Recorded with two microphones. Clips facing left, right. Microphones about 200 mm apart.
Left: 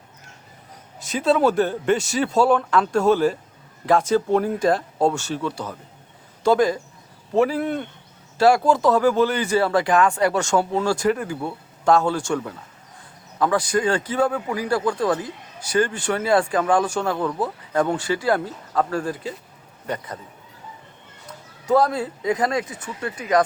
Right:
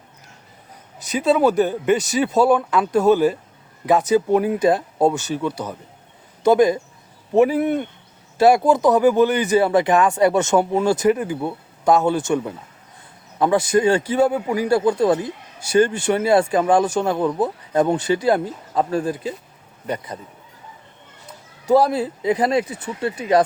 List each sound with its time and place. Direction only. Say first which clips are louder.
1.1 s speech: right 2 dB; centre (ahead or behind)
1.5 s speech: right 2 dB; 15° right (ahead or behind)
2.0 s speech: right 3 dB; centre (ahead or behind)
2.3 s speech: right 1 dB; 15° right (ahead or behind)
21.7 s speech: right 3 dB; 10° right (ahead or behind)
21.9 s speech: right 3 dB; 25° right (ahead or behind)